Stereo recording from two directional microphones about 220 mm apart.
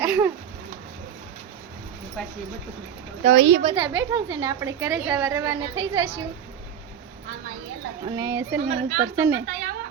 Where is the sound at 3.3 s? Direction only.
55° right (ahead or behind).